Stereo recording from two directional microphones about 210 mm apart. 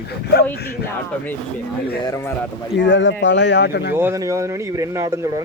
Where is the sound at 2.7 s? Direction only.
60° left (ahead or behind).